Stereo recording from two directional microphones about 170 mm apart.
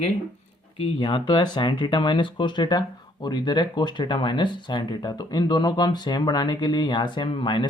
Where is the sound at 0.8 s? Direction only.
30° left (ahead or behind).